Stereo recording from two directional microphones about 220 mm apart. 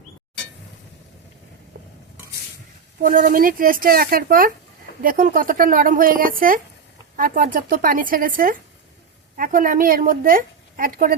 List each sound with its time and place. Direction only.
1.7 s stir: 45° right (ahead or behind)
3.0 s a woman's voice: 40° right (ahead or behind)